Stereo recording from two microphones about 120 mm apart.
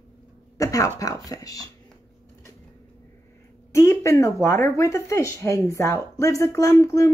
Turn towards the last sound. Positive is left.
turn(degrees=25)  # may be behind; listen again after turning